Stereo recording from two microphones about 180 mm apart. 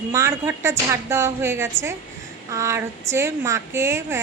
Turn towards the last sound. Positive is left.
turn(degrees=-15)  # may be behind; listen again after turning